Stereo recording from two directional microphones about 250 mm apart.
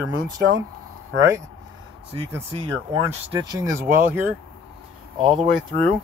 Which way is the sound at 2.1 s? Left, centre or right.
Centre.